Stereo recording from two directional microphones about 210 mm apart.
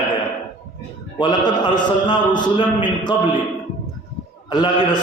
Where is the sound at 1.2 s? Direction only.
20° left (ahead or behind).